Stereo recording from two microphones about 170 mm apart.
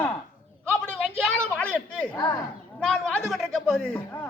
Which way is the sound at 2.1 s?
20° left (ahead or behind).